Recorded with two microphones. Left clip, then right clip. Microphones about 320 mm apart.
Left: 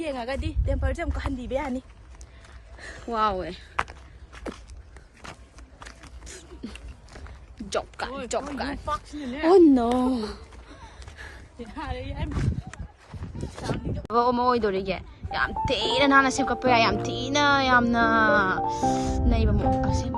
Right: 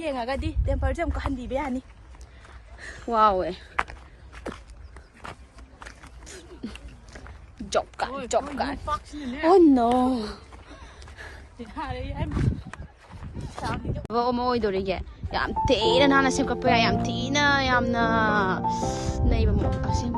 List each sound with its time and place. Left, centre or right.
0.0 s speech: centre
2.7 s a sound: centre
3.1 s speech: centre
4.4 s walk: centre
5.8 s a sound: centre
14.0 s speech: centre